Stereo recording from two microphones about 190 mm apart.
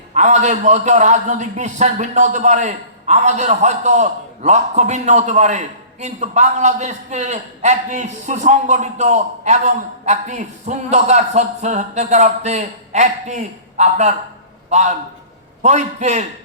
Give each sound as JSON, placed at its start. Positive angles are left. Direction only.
{"t": 0.1, "sound": "a man's voice", "side_deg": -40}